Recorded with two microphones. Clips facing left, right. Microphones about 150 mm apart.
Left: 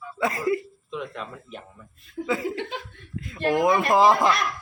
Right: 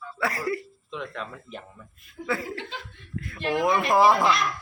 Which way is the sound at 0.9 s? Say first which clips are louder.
Left 1 dB; 5° left (ahead or behind).